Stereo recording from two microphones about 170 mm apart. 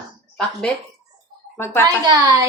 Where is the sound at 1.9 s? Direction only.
20° right (ahead or behind).